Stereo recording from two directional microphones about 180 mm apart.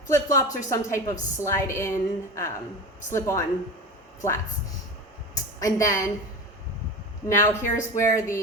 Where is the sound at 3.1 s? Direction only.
15° left (ahead or behind).